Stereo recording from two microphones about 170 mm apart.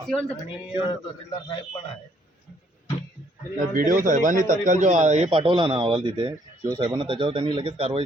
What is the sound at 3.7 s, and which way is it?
A man's voice, 50° right (ahead or behind).